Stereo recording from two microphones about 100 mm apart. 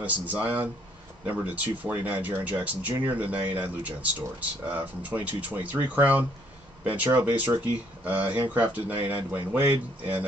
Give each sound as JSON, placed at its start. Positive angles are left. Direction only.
{"t": 0.0, "sound": "speech", "side_deg": -15}